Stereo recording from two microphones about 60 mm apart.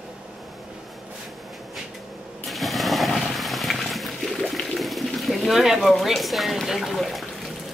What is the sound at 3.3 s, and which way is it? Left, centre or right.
Water, centre.